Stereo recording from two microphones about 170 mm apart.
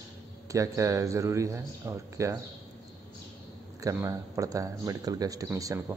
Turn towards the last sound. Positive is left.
turn(degrees=-20)  # may be behind; listen again after turning